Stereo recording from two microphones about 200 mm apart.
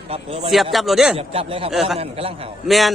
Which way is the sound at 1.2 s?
30° right (ahead or behind).